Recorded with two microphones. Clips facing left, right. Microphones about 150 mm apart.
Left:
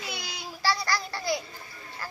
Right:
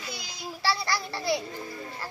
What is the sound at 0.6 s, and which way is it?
Speech, 25° right (ahead or behind).